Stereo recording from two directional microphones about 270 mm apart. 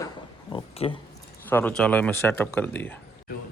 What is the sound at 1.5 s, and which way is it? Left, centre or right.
Speech, centre.